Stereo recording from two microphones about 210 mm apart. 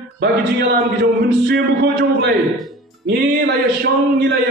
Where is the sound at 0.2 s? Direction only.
50° right (ahead or behind).